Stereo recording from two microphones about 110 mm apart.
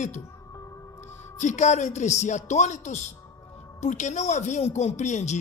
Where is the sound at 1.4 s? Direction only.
90° left.